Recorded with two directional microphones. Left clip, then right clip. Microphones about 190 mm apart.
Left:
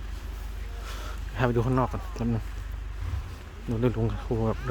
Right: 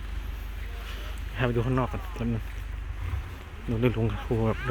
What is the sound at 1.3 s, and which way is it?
Speech, 15° left (ahead or behind).